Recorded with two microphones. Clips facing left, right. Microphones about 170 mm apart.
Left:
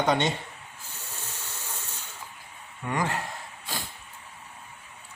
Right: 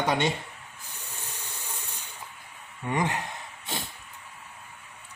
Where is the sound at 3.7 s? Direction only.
20° right (ahead or behind).